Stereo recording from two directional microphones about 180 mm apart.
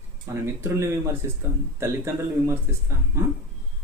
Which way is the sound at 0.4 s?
15° right (ahead or behind).